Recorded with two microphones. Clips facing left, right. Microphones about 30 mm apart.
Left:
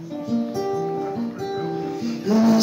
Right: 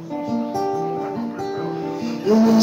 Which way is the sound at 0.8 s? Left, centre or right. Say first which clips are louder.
Right 1 dB; centre.